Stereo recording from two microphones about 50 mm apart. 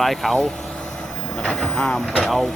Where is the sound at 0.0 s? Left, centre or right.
Centre.